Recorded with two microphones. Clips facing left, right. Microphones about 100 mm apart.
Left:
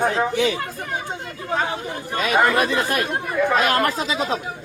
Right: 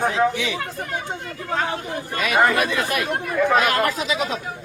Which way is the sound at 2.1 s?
35° left (ahead or behind).